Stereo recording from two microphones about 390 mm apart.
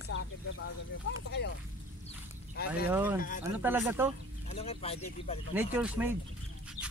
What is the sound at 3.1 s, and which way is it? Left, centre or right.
Speech, left.